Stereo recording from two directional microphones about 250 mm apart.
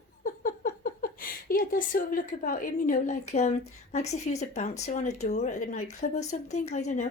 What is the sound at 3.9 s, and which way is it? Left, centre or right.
Speech, left.